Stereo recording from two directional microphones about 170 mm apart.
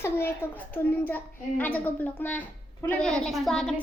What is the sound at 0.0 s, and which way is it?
A child's voice, 15° left (ahead or behind).